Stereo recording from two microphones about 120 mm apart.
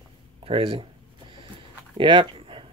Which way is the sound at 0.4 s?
50° right (ahead or behind).